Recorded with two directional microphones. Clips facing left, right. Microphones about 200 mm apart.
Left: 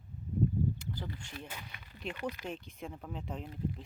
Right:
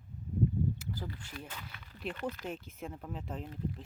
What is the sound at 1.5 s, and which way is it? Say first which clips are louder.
Speech: even; 10° left (ahead or behind).